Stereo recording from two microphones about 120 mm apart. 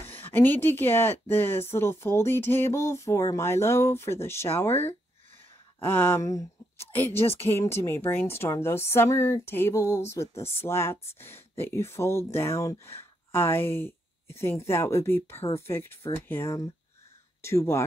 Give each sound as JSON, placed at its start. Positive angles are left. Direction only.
{"t": 0.0, "sound": "a woman's voice", "side_deg": 20}